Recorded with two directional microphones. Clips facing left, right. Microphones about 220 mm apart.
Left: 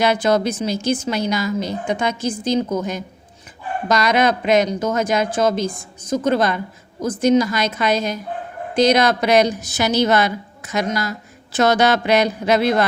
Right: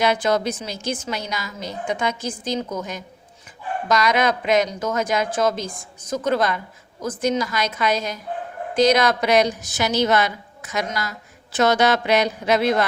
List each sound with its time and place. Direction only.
0.0 s a woman's voice: 35° left (ahead or behind)